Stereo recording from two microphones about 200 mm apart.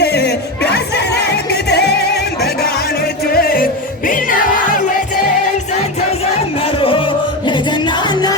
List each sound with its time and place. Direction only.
0.0 s crowd: 55° left (ahead or behind)
3.2 s music: 50° left (ahead or behind)
7.4 s music: 25° left (ahead or behind)